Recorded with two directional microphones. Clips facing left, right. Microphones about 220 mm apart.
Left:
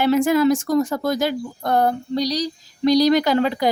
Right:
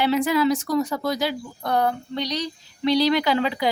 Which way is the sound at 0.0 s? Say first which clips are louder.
Left 4 dB; 45° left (ahead or behind).